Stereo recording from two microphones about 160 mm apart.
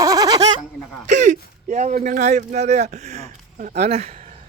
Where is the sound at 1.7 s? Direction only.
50° right (ahead or behind).